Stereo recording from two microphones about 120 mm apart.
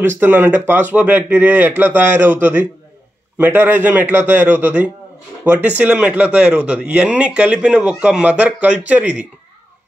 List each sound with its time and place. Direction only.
0.2 s speech: 20° right (ahead or behind)